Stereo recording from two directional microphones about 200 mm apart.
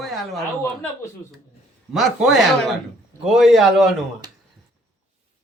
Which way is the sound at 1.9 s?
Centre (ahead or behind).